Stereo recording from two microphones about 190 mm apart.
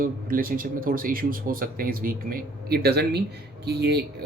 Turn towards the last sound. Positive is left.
turn(degrees=-60)  # may be behind; listen again after turning